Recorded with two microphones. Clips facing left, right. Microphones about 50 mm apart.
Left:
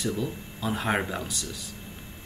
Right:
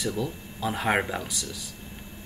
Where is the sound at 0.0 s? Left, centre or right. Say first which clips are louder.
Even; centre.